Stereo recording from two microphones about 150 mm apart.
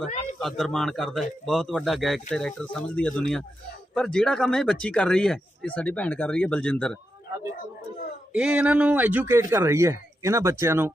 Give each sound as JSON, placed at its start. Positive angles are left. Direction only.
{"t": 0.3, "sound": "a man's voice", "side_deg": 5}
{"t": 8.3, "sound": "speech", "side_deg": -5}